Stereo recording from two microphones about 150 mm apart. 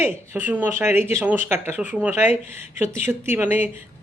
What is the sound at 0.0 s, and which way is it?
A woman's voice, 10° right (ahead or behind).